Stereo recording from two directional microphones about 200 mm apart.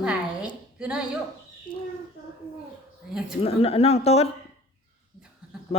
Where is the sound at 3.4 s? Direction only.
30° left (ahead or behind).